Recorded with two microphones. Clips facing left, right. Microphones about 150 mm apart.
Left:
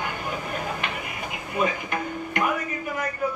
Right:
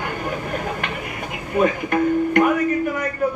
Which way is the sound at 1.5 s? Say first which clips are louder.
Right 8 dB; 50° right (ahead or behind).